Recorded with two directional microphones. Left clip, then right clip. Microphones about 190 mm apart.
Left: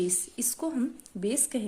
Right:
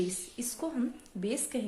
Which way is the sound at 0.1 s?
45° left (ahead or behind).